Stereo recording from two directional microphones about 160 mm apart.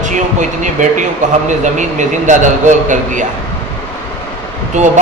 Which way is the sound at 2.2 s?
50° right (ahead or behind).